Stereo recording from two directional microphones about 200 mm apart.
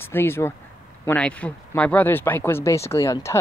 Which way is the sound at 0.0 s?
10° left (ahead or behind).